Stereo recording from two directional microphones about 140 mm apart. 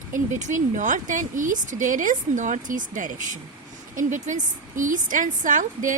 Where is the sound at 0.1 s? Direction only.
60° right (ahead or behind).